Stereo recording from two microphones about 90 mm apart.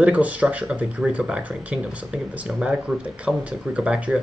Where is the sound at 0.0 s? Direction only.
15° right (ahead or behind).